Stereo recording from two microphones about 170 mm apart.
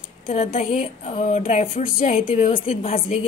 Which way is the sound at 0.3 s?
35° left (ahead or behind).